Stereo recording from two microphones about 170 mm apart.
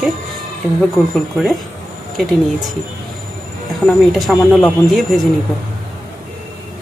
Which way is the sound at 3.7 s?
Centre (ahead or behind).